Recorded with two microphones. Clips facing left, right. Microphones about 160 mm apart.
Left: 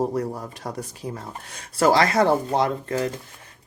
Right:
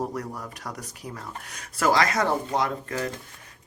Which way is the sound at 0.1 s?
30° left (ahead or behind).